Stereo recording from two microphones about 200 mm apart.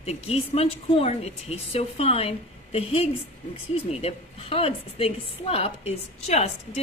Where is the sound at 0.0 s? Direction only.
30° left (ahead or behind).